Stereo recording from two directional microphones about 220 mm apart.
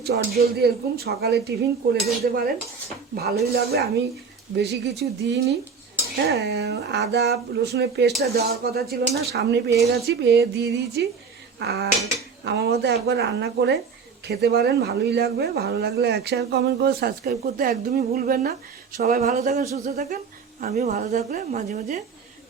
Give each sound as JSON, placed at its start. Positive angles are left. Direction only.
{"t": 0.0, "sound": "a woman's voice", "side_deg": -45}